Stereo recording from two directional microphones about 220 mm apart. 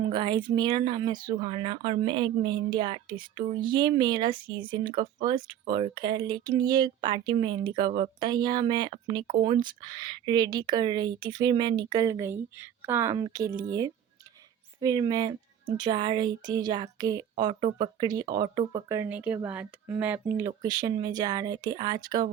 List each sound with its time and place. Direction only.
0.0 s speech: 20° right (ahead or behind)